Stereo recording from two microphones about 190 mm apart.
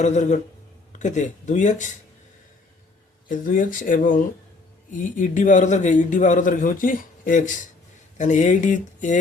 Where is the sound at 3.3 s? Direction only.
45° left (ahead or behind).